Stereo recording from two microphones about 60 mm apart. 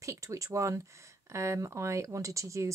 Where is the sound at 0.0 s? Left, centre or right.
Right.